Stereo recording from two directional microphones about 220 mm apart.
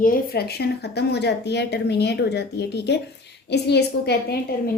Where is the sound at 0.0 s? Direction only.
40° left (ahead or behind).